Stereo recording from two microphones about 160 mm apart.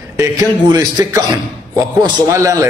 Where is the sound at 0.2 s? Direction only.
25° right (ahead or behind).